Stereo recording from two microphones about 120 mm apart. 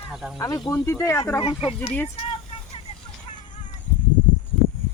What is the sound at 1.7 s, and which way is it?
Speech, 15° left (ahead or behind).